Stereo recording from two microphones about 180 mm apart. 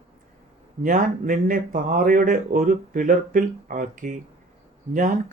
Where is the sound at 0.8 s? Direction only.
45° right (ahead or behind).